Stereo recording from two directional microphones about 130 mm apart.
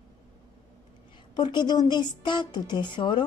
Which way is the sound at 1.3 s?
35° left (ahead or behind).